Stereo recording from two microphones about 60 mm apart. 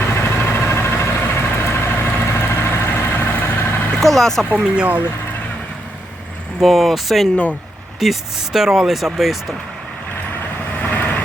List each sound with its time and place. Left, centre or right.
0.1 s vehicle: left
4.0 s speech: centre
4.6 s speech: centre
6.6 s speech: centre
10.8 s vehicle: left